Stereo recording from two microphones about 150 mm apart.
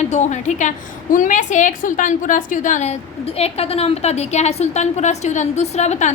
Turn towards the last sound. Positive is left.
turn(degrees=50)  # may be behind; listen again after turning